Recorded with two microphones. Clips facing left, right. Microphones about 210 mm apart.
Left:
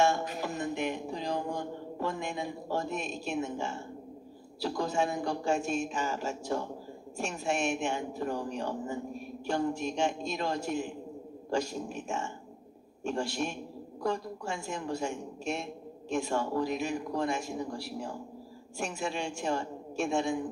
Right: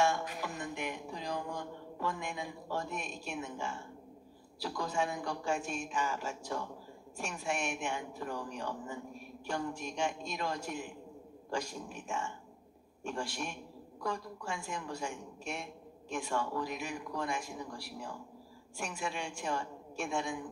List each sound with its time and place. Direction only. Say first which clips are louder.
0.2 s a sound: left 6 dB; 25° left (ahead or behind)
3.4 s a woman's voice: left 5 dB; 25° left (ahead or behind)
8.7 s a man's voice: left 7 dB; 40° left (ahead or behind)
9.5 s a woman's voice: left 7 dB; 25° left (ahead or behind)
13.0 s a woman's voice: left 6 dB; 25° left (ahead or behind)
16.3 s a man's voice: left 3 dB; 40° left (ahead or behind)
18.8 s a woman's voice: left 5 dB; 25° left (ahead or behind)